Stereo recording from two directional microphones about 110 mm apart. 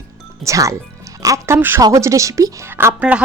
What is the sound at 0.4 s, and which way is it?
Speech, 30° right (ahead or behind).